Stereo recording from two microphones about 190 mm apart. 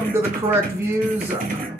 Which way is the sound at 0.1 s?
10° right (ahead or behind).